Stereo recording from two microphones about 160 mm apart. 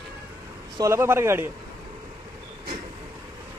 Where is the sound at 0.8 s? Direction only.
15° right (ahead or behind).